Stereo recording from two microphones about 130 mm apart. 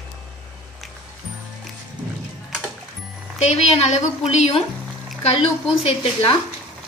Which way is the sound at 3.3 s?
60° left (ahead or behind).